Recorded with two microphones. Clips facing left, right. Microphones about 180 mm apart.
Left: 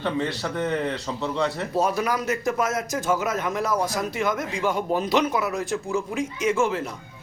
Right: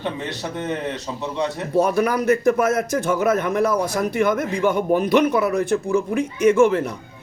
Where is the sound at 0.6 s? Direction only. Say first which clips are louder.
Left 1 dB; 20° right (ahead or behind).